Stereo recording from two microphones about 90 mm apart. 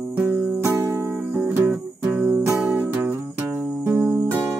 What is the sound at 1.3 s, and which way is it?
Music, 20° right (ahead or behind).